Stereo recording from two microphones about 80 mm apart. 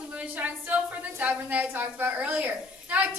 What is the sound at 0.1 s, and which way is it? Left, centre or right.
A woman's voice, centre.